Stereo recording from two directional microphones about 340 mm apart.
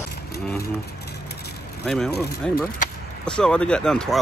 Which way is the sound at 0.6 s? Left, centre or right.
Left.